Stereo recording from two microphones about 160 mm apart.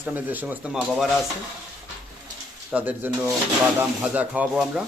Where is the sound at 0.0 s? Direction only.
10° right (ahead or behind).